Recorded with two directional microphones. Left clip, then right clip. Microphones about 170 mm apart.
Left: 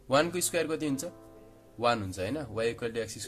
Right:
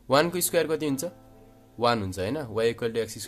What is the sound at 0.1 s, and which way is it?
Speech, 35° right (ahead or behind).